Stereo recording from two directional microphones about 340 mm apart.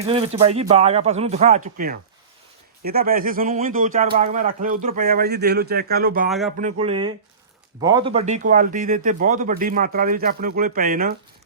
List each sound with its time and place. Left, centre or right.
0.0 s speech: centre
6.2 s speech: centre
6.6 s speech: centre